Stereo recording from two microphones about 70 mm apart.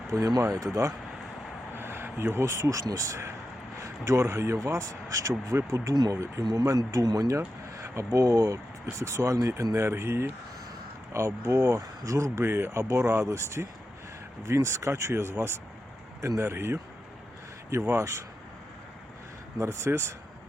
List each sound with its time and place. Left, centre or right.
0.1 s speech: right
1.7 s a sound: right
2.8 s speech: right
6.4 s speech: right
8.2 s speech: right
9.0 s speech: right
19.5 s speech: right